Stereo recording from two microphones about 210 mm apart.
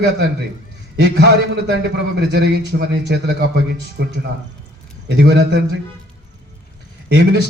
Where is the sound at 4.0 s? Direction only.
55° right (ahead or behind).